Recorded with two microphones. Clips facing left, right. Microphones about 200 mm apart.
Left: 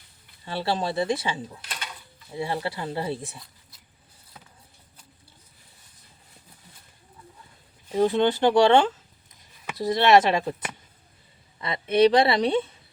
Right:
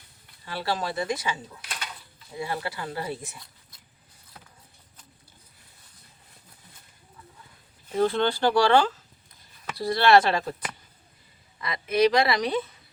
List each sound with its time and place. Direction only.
0.4 s a woman's voice: 25° left (ahead or behind)
7.9 s a woman's voice: 15° left (ahead or behind)
11.6 s a woman's voice: 30° left (ahead or behind)